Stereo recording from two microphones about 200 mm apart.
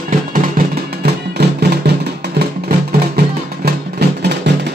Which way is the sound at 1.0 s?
55° right (ahead or behind).